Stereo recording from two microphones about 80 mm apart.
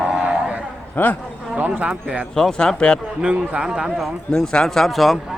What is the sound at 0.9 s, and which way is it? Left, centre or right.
Speech, left.